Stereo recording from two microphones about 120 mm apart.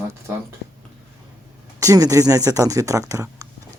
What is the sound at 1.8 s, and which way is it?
Speech, 30° right (ahead or behind).